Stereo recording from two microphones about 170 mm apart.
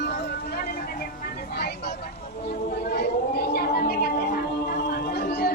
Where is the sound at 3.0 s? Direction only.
70° left (ahead or behind).